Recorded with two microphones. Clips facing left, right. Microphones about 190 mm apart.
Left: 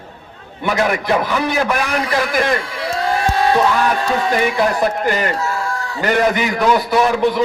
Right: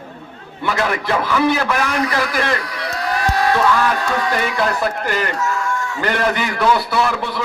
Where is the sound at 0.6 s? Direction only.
15° left (ahead or behind).